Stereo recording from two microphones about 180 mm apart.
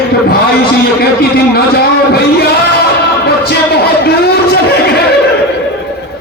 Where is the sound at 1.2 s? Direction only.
60° left (ahead or behind).